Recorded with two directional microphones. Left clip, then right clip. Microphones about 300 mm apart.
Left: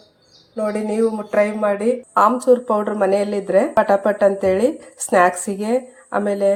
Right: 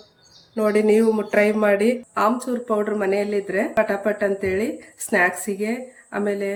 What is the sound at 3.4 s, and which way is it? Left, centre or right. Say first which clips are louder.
A woman's voice: left 6 dB; left.